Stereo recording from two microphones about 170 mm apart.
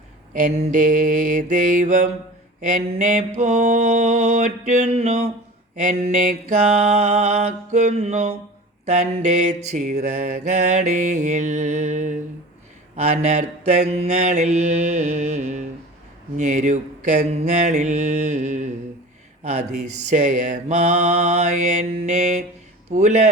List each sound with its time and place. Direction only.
0.3 s mantra: 45° right (ahead or behind)
5.7 s mantra: 50° right (ahead or behind)
6.7 s mantra: 40° right (ahead or behind)
20.1 s mantra: 50° right (ahead or behind)